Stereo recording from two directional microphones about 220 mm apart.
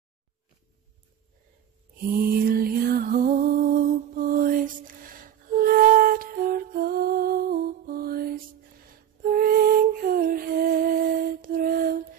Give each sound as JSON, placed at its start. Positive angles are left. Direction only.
{"t": 2.1, "sound": "music", "side_deg": -45}